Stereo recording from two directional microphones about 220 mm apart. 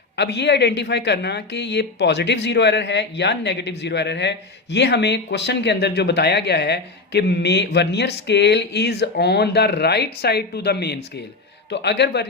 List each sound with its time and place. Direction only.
0.2 s speech: 50° left (ahead or behind)